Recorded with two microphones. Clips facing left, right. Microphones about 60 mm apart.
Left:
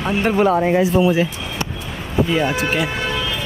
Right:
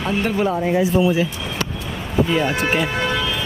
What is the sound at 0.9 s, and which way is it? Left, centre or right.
Speech, left.